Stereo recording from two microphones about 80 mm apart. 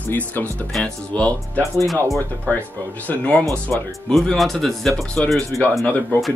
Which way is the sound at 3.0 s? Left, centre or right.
Centre.